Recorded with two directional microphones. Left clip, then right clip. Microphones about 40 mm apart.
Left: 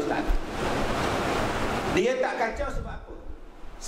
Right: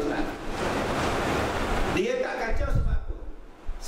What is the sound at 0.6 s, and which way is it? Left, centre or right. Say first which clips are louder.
Waves: even; centre.